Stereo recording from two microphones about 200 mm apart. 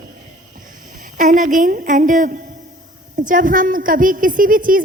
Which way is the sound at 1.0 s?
40° right (ahead or behind).